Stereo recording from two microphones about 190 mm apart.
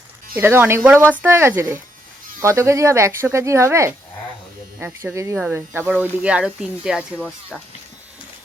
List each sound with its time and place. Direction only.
0.3 s speech: 10° right (ahead or behind)
7.2 s speech: 10° left (ahead or behind)